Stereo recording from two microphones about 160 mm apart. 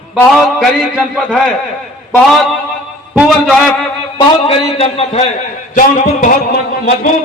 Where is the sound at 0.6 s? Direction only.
5° left (ahead or behind).